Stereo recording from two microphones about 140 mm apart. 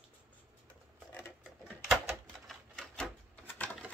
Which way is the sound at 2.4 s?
5° left (ahead or behind).